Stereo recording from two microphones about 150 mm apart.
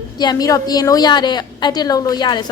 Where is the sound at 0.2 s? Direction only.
25° left (ahead or behind).